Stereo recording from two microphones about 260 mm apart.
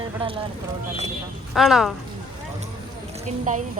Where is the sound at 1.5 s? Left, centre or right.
Centre.